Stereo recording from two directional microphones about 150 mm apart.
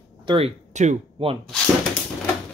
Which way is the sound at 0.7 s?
50° right (ahead or behind).